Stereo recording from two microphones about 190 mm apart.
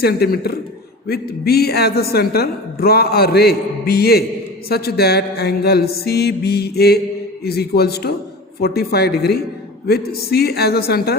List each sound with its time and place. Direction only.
0.0 s a woman's voice: 55° left (ahead or behind)